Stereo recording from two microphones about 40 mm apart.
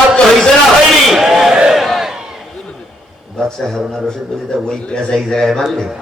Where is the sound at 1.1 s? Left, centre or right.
Centre.